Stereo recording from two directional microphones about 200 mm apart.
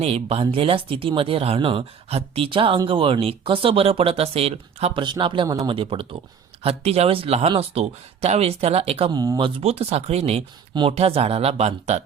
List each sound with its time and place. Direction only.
0.0 s speech: 30° right (ahead or behind)
9.6 s speech: 30° right (ahead or behind)